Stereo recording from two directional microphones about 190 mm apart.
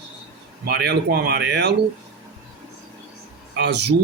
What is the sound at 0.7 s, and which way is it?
Speech, 60° right (ahead or behind).